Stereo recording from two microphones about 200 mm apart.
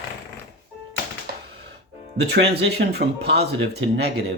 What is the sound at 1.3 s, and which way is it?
Typewriter, 50° right (ahead or behind).